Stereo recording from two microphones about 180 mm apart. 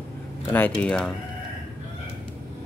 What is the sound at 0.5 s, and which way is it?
Speech, 10° left (ahead or behind).